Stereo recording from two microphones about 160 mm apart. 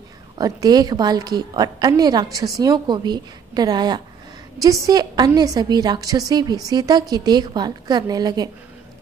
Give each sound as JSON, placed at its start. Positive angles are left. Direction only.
{"t": 0.4, "sound": "a woman's voice", "side_deg": -25}